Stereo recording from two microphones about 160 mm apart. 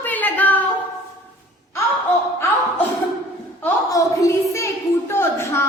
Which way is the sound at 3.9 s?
20° left (ahead or behind).